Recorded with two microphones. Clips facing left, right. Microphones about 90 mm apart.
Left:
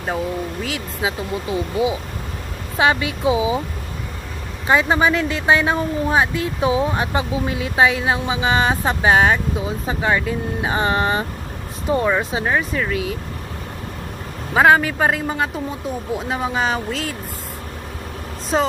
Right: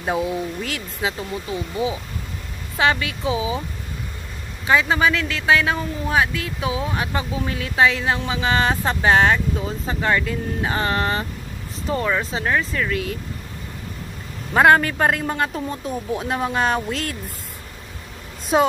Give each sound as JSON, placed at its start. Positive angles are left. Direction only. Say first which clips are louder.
{"t": 0.0, "sound": "speech", "louder": "right 1 dB", "side_deg": -5}
{"t": 1.0, "sound": "speech", "louder": "left 2 dB", "side_deg": 15}
{"t": 4.6, "sound": "speech", "louder": "left 2 dB", "side_deg": 30}
{"t": 7.2, "sound": "speech", "louder": "left 4 dB", "side_deg": 15}
{"t": 14.5, "sound": "speech", "louder": "left 1 dB", "side_deg": 5}
{"t": 18.5, "sound": "speech", "louder": "right 2 dB", "side_deg": -5}